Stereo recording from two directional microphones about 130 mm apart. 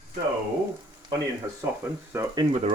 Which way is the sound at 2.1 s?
20° right (ahead or behind).